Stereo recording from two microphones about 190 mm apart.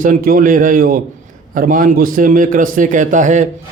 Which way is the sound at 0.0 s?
45° right (ahead or behind).